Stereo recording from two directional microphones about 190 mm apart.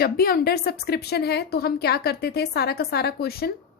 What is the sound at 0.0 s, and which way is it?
A woman's voice, 55° left (ahead or behind).